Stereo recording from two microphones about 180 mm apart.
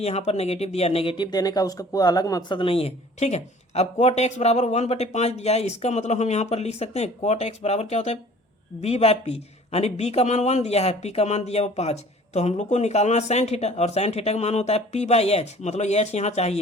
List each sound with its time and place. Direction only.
0.0 s speech: 35° left (ahead or behind)